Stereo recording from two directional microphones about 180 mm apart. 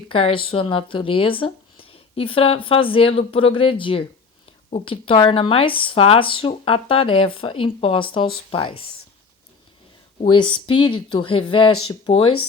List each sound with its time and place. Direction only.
0.1 s speech: 30° left (ahead or behind)
10.2 s speech: 25° left (ahead or behind)